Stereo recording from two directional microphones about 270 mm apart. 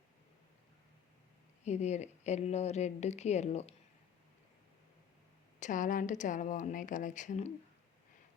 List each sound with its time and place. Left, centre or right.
1.6 s a woman's voice: left
5.5 s a woman's voice: left